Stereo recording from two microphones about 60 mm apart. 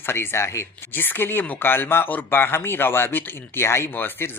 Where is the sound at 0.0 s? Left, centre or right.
Left.